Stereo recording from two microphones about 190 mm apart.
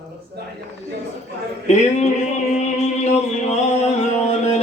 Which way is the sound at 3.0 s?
35° left (ahead or behind).